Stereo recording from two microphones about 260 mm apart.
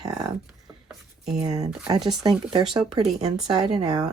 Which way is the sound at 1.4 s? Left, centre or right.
Centre.